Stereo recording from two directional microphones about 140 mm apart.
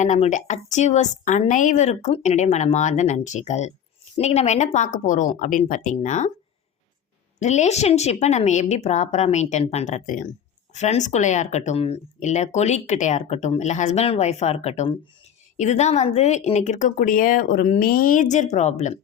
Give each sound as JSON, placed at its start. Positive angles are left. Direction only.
{"t": 0.0, "sound": "speech", "side_deg": 60}
{"t": 7.3, "sound": "speech", "side_deg": 55}